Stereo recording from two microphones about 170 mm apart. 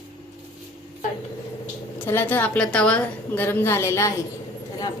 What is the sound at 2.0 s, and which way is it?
A woman's voice, 15° left (ahead or behind).